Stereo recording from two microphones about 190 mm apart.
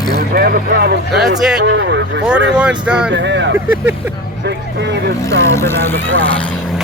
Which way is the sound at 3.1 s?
70° right (ahead or behind).